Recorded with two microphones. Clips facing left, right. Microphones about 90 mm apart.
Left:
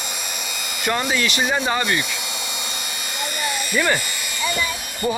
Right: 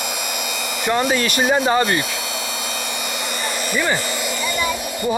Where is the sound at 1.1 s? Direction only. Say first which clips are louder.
Right 4 dB; 40° right (ahead or behind).